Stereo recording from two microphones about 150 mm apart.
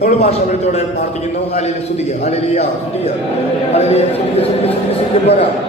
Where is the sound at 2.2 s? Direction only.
45° left (ahead or behind).